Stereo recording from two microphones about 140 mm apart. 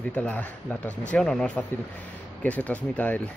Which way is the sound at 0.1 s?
10° left (ahead or behind).